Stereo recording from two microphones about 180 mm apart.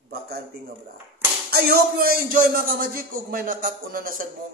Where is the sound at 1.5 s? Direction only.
60° right (ahead or behind).